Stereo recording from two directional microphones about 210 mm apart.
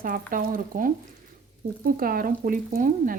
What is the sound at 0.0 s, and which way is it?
Speech, 40° right (ahead or behind).